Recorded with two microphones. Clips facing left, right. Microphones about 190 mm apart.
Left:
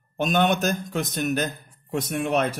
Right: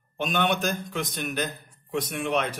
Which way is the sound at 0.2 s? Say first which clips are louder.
Left 4 dB; 45° left (ahead or behind).